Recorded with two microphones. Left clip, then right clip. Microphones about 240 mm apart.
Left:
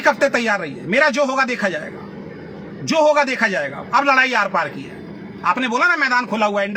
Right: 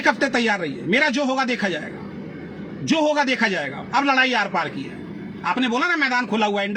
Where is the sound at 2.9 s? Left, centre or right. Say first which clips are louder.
Left 4 dB; left.